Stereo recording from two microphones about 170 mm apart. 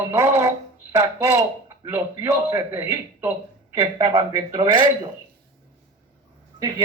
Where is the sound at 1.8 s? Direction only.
15° right (ahead or behind).